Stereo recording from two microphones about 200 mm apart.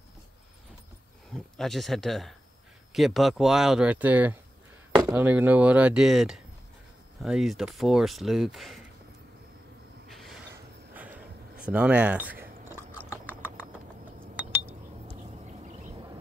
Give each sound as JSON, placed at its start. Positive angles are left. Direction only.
{"t": 1.3, "sound": "speech", "side_deg": 0}
{"t": 5.0, "sound": "chopping", "side_deg": -10}
{"t": 7.2, "sound": "speech", "side_deg": 0}
{"t": 10.0, "sound": "a sound", "side_deg": 0}
{"t": 13.3, "sound": "typing", "side_deg": -5}
{"t": 15.6, "sound": "a sound", "side_deg": -35}